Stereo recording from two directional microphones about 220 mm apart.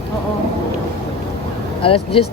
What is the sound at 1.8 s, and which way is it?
Speech, 25° left (ahead or behind).